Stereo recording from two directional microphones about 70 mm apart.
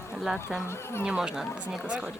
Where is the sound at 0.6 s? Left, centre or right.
Left.